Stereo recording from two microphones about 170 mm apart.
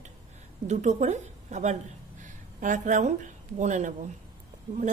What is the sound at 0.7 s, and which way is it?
A woman's voice, 45° right (ahead or behind).